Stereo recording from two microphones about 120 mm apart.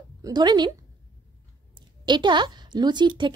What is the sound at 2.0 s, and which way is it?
A woman's voice, 40° right (ahead or behind).